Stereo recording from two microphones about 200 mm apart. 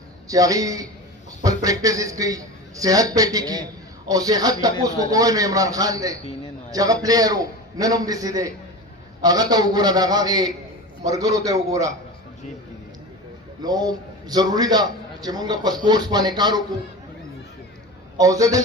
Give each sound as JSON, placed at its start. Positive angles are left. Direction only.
{"t": 0.3, "sound": "a man's voice", "side_deg": -15}
{"t": 13.6, "sound": "a man's voice", "side_deg": -20}
{"t": 18.2, "sound": "a man's voice", "side_deg": -15}